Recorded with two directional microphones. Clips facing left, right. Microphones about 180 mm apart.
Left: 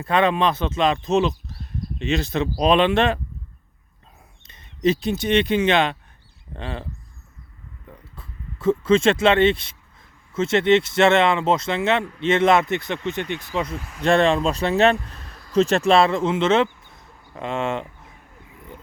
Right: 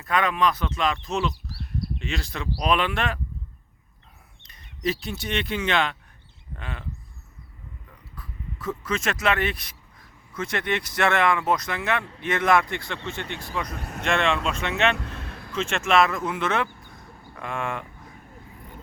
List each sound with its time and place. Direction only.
0.0 s speech: 30° left (ahead or behind)
4.4 s speech: 25° left (ahead or behind)
8.1 s speech: 25° left (ahead or behind)
14.0 s speech: 35° left (ahead or behind)
15.2 s a sound: 65° right (ahead or behind)
15.5 s speech: 40° left (ahead or behind)
16.8 s a sound: 25° left (ahead or behind)